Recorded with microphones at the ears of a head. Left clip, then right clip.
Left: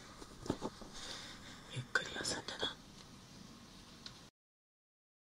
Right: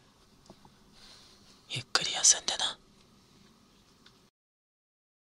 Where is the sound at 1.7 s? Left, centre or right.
Right.